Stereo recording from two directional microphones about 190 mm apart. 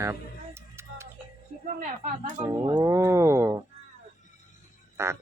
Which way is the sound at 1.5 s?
50° left (ahead or behind).